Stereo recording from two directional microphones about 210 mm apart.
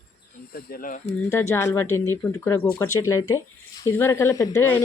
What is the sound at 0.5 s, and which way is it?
Speech, 45° left (ahead or behind).